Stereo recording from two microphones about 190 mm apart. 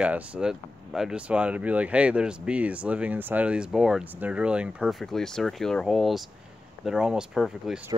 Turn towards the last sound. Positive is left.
turn(degrees=-5)  # may be behind; listen again after turning